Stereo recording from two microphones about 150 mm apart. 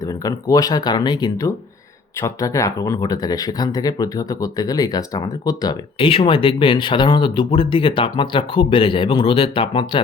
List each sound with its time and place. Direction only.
0.0 s speech: 25° left (ahead or behind)
6.0 s speech: 35° left (ahead or behind)